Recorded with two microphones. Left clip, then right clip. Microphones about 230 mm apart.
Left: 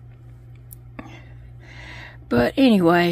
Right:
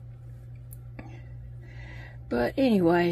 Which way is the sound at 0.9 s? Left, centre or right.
Left.